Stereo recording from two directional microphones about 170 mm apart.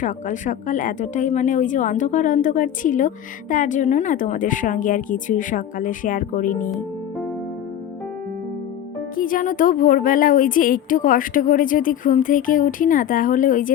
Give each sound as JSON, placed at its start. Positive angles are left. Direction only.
{"t": 0.0, "sound": "a woman's voice", "side_deg": 50}
{"t": 9.1, "sound": "a woman's voice", "side_deg": 55}